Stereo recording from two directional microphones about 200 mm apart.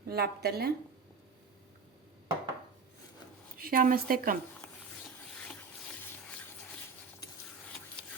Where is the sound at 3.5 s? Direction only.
45° right (ahead or behind).